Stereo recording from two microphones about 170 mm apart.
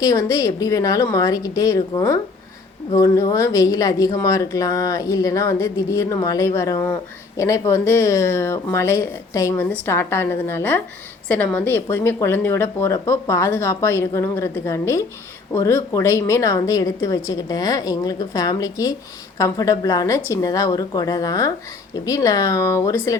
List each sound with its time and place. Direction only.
0.0 s a woman's voice: 20° left (ahead or behind)